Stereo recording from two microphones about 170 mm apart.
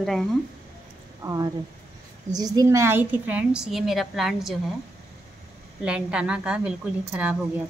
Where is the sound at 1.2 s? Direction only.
20° right (ahead or behind); by 4.5 s centre (ahead or behind).